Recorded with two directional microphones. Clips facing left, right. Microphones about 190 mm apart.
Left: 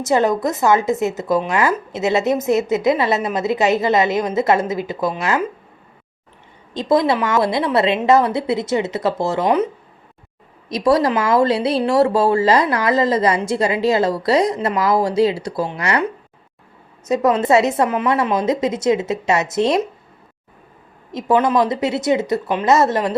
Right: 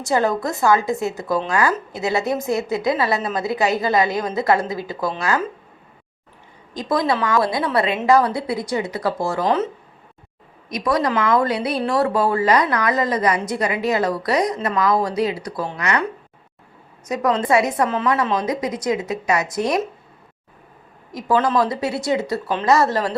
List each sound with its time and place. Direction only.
0.0 s speech: 20° left (ahead or behind)
6.7 s speech: 25° left (ahead or behind)
10.7 s speech: 30° left (ahead or behind)
21.1 s speech: 25° left (ahead or behind)